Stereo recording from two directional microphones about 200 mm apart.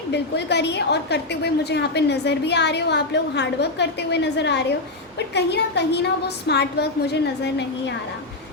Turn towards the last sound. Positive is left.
turn(degrees=60)  # may be behind; listen again after turning